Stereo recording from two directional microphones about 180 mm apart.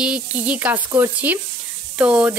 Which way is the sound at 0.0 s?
5° right (ahead or behind).